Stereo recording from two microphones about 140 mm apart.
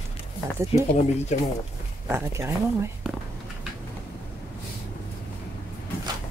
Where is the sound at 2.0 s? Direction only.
20° right (ahead or behind).